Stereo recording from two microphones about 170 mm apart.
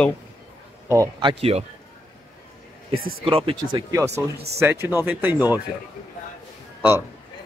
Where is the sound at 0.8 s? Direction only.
20° right (ahead or behind).